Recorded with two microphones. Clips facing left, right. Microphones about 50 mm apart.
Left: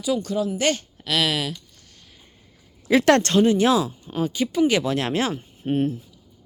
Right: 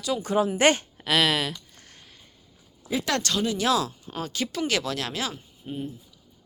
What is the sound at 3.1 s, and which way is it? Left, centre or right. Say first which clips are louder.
Speech: left 9 dB; left.